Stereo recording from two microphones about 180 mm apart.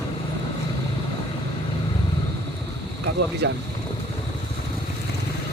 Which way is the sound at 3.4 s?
70° right (ahead or behind).